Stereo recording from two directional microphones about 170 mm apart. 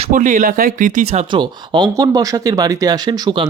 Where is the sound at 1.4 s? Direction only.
25° right (ahead or behind).